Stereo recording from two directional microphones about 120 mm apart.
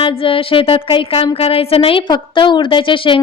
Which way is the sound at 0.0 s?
50° left (ahead or behind).